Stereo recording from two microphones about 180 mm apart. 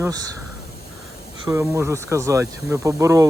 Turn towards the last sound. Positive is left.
turn(degrees=-15)  # may be behind; listen again after turning